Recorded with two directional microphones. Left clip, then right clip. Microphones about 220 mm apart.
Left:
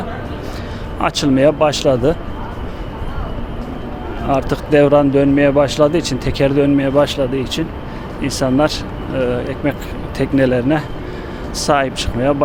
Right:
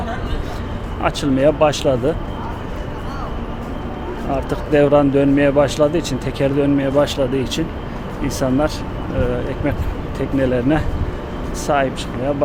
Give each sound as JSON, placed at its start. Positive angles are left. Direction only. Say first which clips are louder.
{"t": 1.0, "sound": "speech", "louder": "left 3 dB", "side_deg": 20}
{"t": 4.3, "sound": "speech", "louder": "left 4 dB", "side_deg": 15}
{"t": 11.6, "sound": "speech", "louder": "left 3 dB", "side_deg": 15}